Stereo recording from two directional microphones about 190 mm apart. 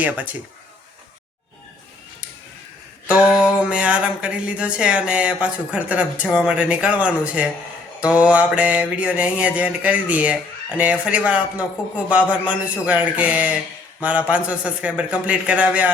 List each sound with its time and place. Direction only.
0.0 s mantra: 10° right (ahead or behind)
3.2 s speech: 5° right (ahead or behind)
8.0 s mantra: 5° right (ahead or behind)